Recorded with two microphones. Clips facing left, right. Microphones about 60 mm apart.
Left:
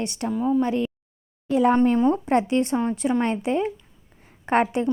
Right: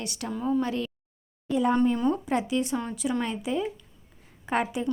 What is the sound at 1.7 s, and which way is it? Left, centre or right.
A woman's voice, left.